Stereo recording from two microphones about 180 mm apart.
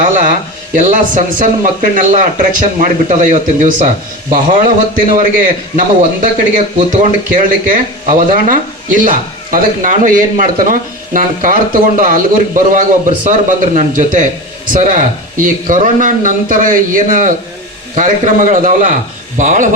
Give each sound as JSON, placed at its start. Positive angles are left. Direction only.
{"t": 0.0, "sound": "speech", "side_deg": -45}